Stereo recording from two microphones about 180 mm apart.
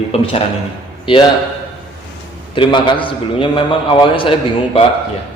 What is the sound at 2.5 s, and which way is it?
A man's voice, 25° left (ahead or behind).